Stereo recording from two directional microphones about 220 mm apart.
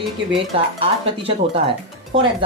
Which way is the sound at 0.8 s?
25° right (ahead or behind).